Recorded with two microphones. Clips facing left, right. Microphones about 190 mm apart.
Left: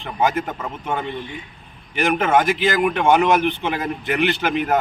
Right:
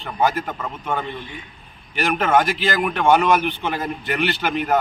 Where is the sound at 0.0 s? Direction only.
20° left (ahead or behind).